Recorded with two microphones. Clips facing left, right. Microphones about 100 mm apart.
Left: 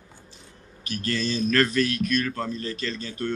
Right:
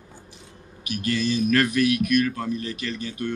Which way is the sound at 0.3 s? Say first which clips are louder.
Right 3 dB; 15° right (ahead or behind).